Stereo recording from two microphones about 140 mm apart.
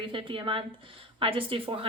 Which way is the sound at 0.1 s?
40° right (ahead or behind).